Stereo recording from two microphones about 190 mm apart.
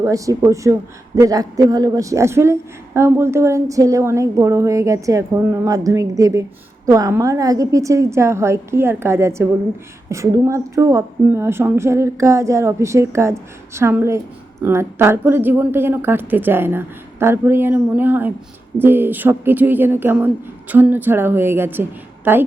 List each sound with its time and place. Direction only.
0.0 s a man's voice: 15° right (ahead or behind)